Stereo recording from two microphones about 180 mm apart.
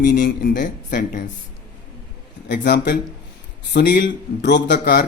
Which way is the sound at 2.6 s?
75° left (ahead or behind).